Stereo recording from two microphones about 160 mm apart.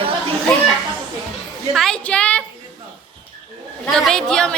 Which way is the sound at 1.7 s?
5° left (ahead or behind).